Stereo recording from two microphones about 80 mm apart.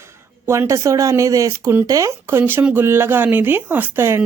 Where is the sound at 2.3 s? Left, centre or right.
Right.